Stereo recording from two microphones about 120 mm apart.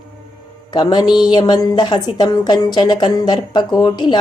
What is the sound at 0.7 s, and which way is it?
Speech, 35° left (ahead or behind).